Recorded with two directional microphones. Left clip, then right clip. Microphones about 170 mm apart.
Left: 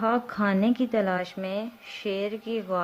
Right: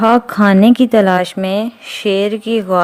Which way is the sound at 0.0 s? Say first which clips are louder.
Right 14 dB; 45° right (ahead or behind).